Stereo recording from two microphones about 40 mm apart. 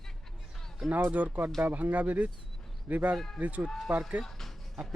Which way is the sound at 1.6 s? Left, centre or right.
Right.